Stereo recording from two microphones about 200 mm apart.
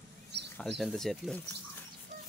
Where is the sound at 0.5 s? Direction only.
5° left (ahead or behind).